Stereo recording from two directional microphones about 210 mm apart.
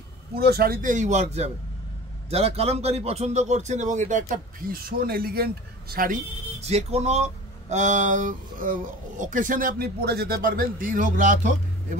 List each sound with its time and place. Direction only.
0.4 s a man's voice: 50° right (ahead or behind)